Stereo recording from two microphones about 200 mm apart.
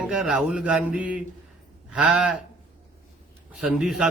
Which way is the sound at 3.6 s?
Centre (ahead or behind).